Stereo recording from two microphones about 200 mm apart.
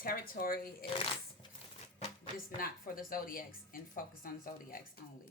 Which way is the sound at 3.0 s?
45° left (ahead or behind).